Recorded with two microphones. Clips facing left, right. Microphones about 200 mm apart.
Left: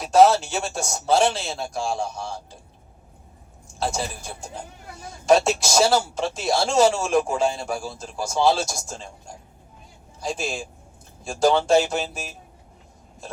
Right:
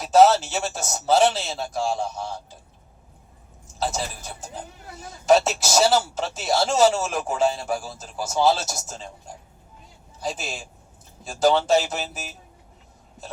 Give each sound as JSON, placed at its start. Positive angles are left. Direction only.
{"t": 0.0, "sound": "speech", "side_deg": 0}
{"t": 3.7, "sound": "a man's voice", "side_deg": 0}